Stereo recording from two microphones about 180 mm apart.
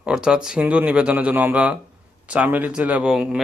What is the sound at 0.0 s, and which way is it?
Speech, 5° right (ahead or behind).